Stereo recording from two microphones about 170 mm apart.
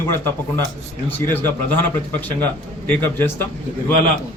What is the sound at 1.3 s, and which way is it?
A man's voice, 10° left (ahead or behind).